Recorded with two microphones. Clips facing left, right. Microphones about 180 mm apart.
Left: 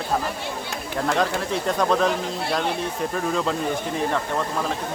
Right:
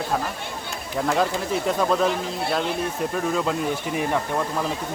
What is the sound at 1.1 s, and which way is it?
Speech, 5° right (ahead or behind).